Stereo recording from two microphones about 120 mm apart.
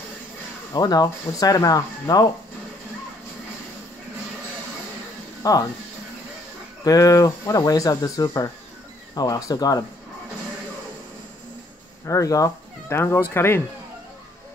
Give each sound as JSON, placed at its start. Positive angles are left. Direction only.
{"t": 0.7, "sound": "speech", "side_deg": 35}
{"t": 5.4, "sound": "speech", "side_deg": 30}
{"t": 6.8, "sound": "speech", "side_deg": 30}
{"t": 12.1, "sound": "speech", "side_deg": 30}